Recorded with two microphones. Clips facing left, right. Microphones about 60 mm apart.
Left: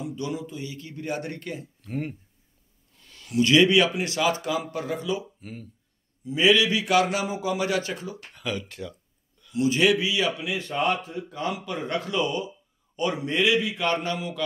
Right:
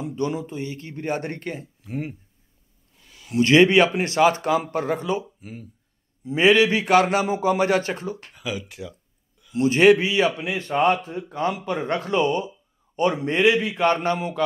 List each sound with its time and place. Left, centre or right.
0.0 s speech: right
1.8 s speech: centre
3.0 s a sound: centre
3.3 s speech: right
5.4 s speech: centre
6.2 s speech: right
8.3 s speech: centre
9.6 s speech: right